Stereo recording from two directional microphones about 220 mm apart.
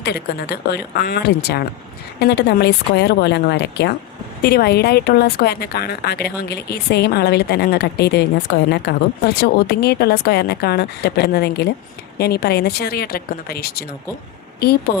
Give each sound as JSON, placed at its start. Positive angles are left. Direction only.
{"t": 0.0, "sound": "speech", "side_deg": 45}
{"t": 14.9, "sound": "speech", "side_deg": 45}